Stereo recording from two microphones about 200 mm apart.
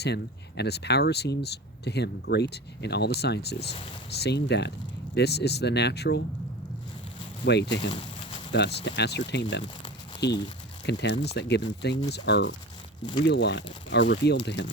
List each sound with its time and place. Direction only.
0.0 s speech: 55° left (ahead or behind)
7.4 s speech: 60° left (ahead or behind)